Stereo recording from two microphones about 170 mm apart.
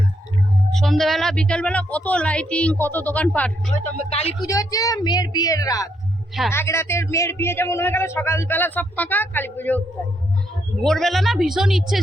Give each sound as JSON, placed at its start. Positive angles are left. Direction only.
{"t": 0.7, "sound": "a man's voice", "side_deg": 0}
{"t": 3.9, "sound": "speech", "side_deg": 35}
{"t": 4.4, "sound": "a woman's voice", "side_deg": 20}
{"t": 10.8, "sound": "a woman's voice", "side_deg": 0}